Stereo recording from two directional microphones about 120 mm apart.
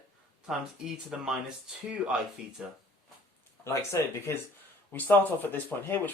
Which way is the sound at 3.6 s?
20° left (ahead or behind).